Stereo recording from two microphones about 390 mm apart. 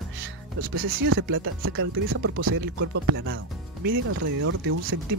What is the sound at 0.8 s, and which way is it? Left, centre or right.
Speech, right.